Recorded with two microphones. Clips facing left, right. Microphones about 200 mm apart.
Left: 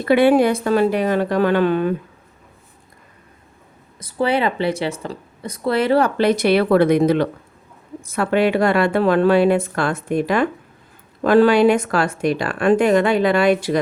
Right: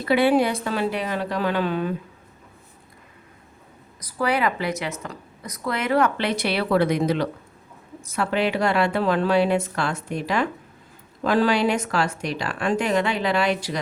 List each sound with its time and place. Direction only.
0.0 s speech: 50° left (ahead or behind)
4.0 s a woman's voice: 25° left (ahead or behind); by 13.7 s 50° left (ahead or behind)